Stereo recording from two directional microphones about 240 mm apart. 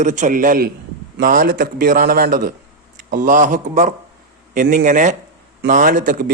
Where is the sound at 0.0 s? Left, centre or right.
Right.